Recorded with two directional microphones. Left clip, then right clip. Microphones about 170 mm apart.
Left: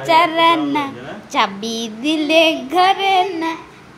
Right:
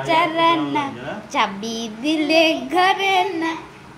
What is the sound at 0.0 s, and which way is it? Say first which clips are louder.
A woman's voice: left 4 dB; 25° left (ahead or behind).